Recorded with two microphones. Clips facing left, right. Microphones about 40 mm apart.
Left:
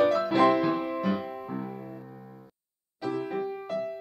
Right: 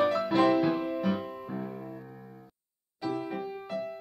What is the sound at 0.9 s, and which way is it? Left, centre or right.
Music, centre.